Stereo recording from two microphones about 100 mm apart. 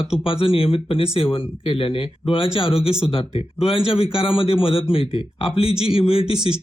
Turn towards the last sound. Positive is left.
turn(degrees=75)  # may be behind; listen again after turning